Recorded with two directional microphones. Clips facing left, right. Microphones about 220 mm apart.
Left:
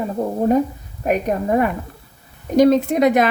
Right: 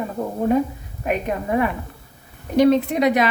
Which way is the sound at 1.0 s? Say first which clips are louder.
Left 4 dB; 40° left (ahead or behind).